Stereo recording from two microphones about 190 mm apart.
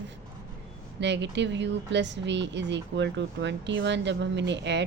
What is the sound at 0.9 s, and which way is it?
Speech, 65° right (ahead or behind).